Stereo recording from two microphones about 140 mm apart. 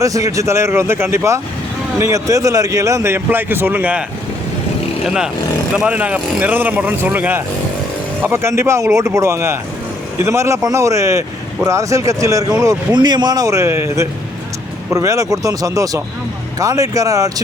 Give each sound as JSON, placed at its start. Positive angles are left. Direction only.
{"t": 0.0, "sound": "speech", "side_deg": -25}
{"t": 5.0, "sound": "speech", "side_deg": -5}